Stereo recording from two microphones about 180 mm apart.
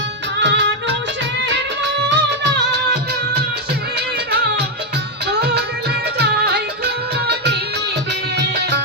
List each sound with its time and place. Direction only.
0.3 s music: 85° right
2.0 s music: 80° right
5.3 s music: 65° right (ahead or behind)